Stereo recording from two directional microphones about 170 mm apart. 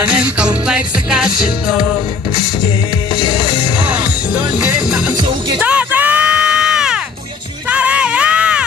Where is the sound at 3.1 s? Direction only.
25° left (ahead or behind).